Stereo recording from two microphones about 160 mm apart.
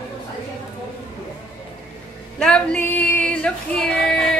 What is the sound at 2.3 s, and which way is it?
Female singing, 5° left (ahead or behind).